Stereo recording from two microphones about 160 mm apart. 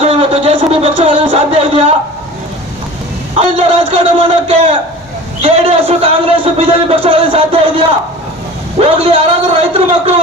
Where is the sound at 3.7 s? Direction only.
35° right (ahead or behind).